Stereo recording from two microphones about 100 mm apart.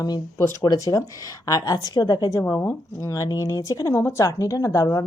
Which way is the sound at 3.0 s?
35° left (ahead or behind).